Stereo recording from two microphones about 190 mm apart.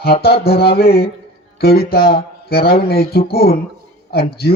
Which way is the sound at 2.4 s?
55° left (ahead or behind).